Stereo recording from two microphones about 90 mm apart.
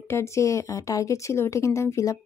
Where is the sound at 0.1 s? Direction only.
30° left (ahead or behind).